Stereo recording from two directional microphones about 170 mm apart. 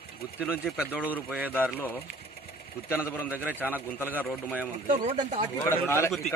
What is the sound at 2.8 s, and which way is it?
Speech, 15° left (ahead or behind).